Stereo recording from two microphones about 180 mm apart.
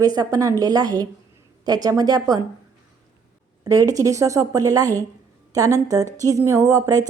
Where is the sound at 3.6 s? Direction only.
20° right (ahead or behind).